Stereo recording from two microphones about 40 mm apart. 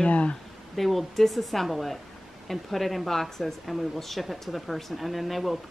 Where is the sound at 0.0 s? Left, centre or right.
Left.